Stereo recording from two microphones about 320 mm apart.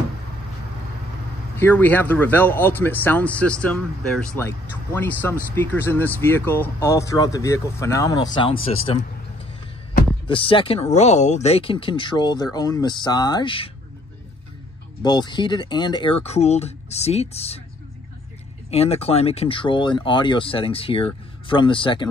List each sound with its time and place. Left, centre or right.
1.6 s speech: centre
15.0 s speech: centre
18.7 s speech: centre